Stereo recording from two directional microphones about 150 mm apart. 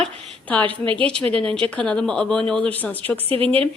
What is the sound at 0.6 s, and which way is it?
Speech, 35° right (ahead or behind).